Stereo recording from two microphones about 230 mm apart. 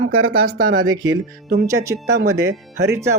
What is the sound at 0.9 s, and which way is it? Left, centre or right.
Speech, centre.